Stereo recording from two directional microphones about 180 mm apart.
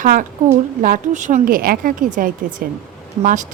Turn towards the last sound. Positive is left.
turn(degrees=-45)  # may be behind; listen again after turning